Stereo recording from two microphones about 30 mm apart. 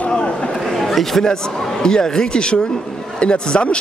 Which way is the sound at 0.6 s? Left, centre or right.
Centre.